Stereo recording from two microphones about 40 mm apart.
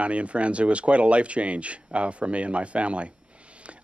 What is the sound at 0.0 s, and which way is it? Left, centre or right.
Speech, right.